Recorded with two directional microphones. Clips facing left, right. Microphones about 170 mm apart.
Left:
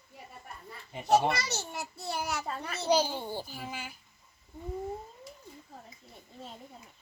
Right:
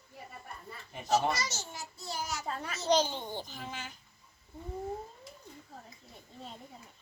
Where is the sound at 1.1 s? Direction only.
60° left (ahead or behind).